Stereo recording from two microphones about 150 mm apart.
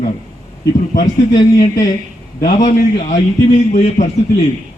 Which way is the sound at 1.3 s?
30° left (ahead or behind).